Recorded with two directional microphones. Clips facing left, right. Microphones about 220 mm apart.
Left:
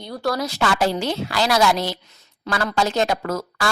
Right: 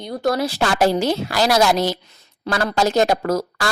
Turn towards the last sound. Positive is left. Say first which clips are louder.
# right 3 dB
turn(degrees=-40)  # may be behind; listen again after turning